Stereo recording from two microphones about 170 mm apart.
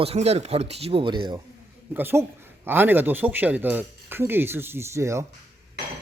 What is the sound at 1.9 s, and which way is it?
Speech, 10° right (ahead or behind).